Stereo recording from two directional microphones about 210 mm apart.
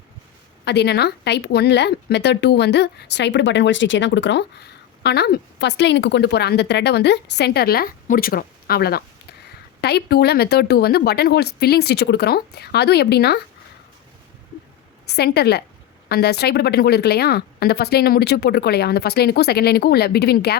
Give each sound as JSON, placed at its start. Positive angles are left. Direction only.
{"t": 0.6, "sound": "a woman's voice", "side_deg": 55}
{"t": 15.1, "sound": "a woman's voice", "side_deg": 50}